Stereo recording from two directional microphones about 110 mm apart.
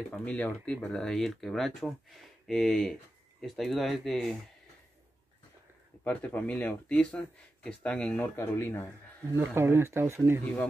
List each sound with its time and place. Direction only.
0.1 s speech: 10° left (ahead or behind)
6.0 s speech: 15° left (ahead or behind)
9.3 s speech: 20° right (ahead or behind)